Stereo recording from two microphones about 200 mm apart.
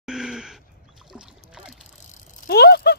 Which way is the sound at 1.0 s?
5° right (ahead or behind).